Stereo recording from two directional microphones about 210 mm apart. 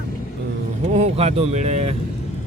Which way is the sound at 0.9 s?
30° right (ahead or behind).